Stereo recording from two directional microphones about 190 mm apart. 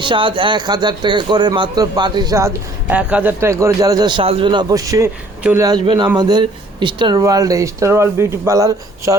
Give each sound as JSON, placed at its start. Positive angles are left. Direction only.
{"t": 0.0, "sound": "speech", "side_deg": -25}
{"t": 5.6, "sound": "speech", "side_deg": -25}